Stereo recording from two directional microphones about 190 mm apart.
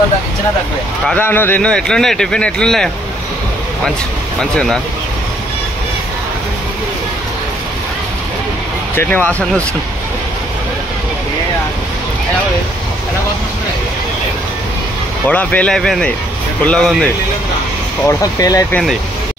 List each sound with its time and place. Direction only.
1.0 s speech: 10° left (ahead or behind)
4.4 s speech: centre (ahead or behind)
8.9 s speech: 10° left (ahead or behind)
15.2 s speech: 5° left (ahead or behind)
18.0 s speech: 20° left (ahead or behind)